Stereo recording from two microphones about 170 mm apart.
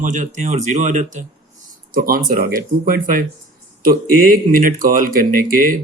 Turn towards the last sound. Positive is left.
turn(degrees=-55)  # may be behind; listen again after turning